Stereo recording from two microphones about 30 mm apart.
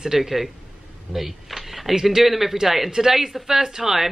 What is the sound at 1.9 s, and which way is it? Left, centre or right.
Speech, centre.